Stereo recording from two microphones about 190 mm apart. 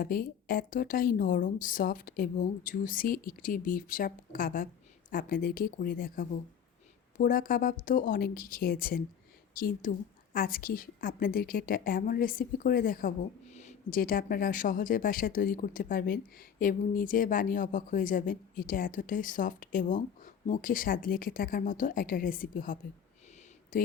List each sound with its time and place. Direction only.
0.0 s a woman's voice: 50° left (ahead or behind)